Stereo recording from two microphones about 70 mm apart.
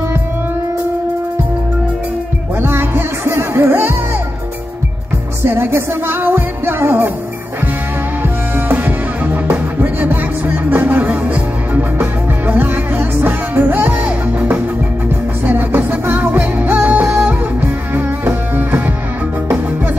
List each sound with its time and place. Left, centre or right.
2.6 s music: right
5.4 s music: right
8.2 s music: right